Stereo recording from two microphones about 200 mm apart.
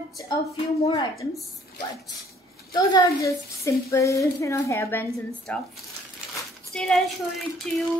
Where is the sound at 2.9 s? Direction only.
15° left (ahead or behind).